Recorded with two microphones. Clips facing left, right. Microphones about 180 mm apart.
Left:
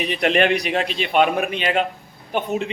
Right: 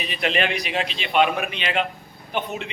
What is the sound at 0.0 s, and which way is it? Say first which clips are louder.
A man's voice: left 6 dB; 55° left (ahead or behind).